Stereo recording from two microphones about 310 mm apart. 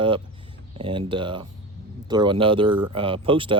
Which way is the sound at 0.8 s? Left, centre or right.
Centre.